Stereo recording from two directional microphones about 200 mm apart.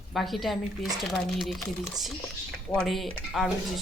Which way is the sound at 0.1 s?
Centre (ahead or behind).